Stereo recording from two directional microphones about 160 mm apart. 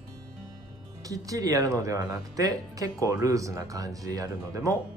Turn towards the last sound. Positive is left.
turn(degrees=-20)  # may be behind; listen again after turning